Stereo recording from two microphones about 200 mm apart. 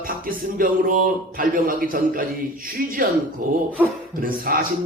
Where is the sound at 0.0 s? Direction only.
45° right (ahead or behind).